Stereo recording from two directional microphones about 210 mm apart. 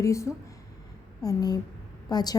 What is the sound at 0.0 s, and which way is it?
A woman's voice, 15° left (ahead or behind).